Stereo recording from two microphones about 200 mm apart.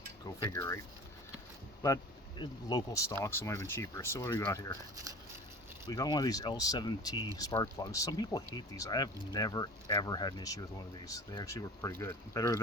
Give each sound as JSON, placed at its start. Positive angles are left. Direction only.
{"t": 0.4, "sound": "speech", "side_deg": 15}
{"t": 2.4, "sound": "speech", "side_deg": 20}
{"t": 5.8, "sound": "speech", "side_deg": 20}